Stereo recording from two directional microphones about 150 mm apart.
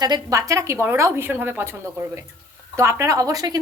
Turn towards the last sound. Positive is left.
turn(degrees=-25)  # may be behind; listen again after turning